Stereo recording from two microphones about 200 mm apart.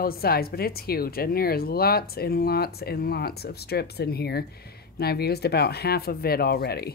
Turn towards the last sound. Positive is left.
turn(degrees=50)  # may be behind; listen again after turning